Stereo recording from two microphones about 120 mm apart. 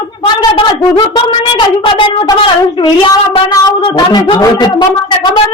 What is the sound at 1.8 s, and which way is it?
Speech, 45° left (ahead or behind).